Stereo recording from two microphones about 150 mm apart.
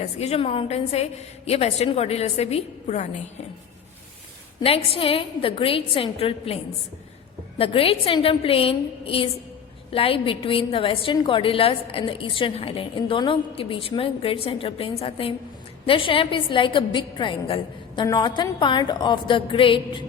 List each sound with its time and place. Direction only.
0.0 s a woman's voice: 45° left (ahead or behind)
4.6 s a woman's voice: 40° left (ahead or behind)
7.6 s a woman's voice: 40° left (ahead or behind)